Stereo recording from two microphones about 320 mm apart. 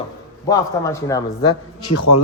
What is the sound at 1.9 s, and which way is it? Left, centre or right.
Speech, left.